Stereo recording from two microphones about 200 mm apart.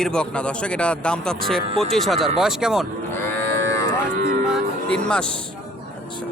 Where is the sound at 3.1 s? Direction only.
10° left (ahead or behind).